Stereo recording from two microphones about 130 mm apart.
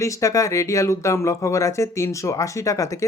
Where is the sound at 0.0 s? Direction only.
25° left (ahead or behind).